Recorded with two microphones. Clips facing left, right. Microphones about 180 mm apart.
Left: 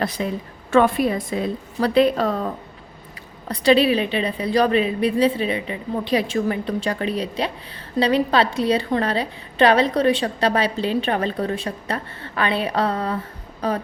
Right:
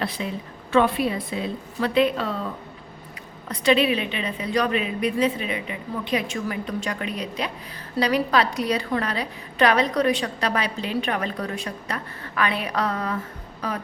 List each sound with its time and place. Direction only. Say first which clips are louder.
0.0 s a woman's voice: left 4 dB; 45° left (ahead or behind)
3.5 s a woman's voice: left 4 dB; 35° left (ahead or behind)